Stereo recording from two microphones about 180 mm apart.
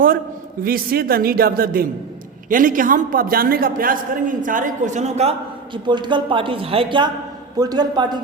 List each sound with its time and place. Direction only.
0.6 s a man's voice: 55° right (ahead or behind); by 8.2 s 25° right (ahead or behind)